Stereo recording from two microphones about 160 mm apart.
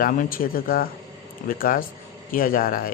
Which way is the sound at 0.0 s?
60° left (ahead or behind).